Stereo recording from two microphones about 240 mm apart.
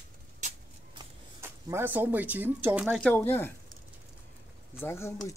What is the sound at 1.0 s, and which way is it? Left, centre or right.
Speech, centre.